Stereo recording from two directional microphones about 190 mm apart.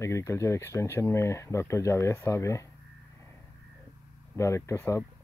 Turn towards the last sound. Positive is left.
turn(degrees=15)  # may be behind; listen again after turning